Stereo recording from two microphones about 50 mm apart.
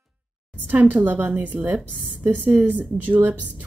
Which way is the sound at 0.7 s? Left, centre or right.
Right.